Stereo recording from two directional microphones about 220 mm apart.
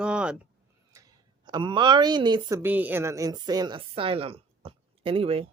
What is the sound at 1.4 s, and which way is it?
A woman's voice, 20° right (ahead or behind).